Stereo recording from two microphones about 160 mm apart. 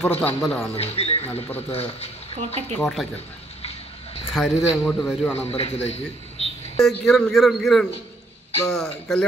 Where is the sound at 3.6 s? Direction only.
40° left (ahead or behind).